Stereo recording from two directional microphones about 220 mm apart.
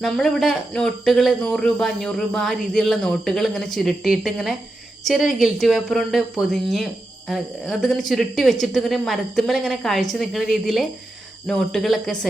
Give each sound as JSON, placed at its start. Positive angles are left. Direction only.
{"t": 0.0, "sound": "speech", "side_deg": 0}